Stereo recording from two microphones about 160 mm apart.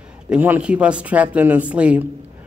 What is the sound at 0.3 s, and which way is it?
Speech, 10° right (ahead or behind).